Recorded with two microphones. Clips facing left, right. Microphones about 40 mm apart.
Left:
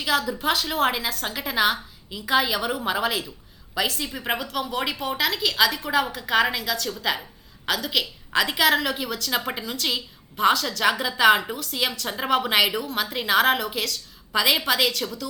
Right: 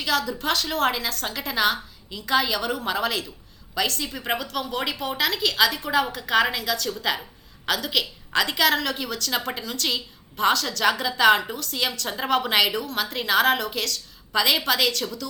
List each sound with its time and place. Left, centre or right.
0.0 s a woman's voice: centre